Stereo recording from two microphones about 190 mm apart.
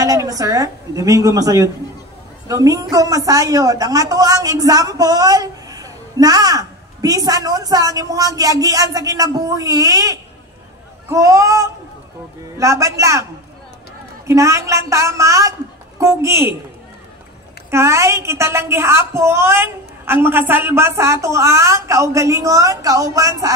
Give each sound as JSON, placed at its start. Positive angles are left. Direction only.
{"t": 0.0, "sound": "a woman's voice", "side_deg": -20}
{"t": 14.2, "sound": "a woman's voice", "side_deg": -15}
{"t": 17.6, "sound": "a woman's voice", "side_deg": -15}